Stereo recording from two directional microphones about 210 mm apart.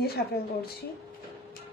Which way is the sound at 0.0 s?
45° left (ahead or behind).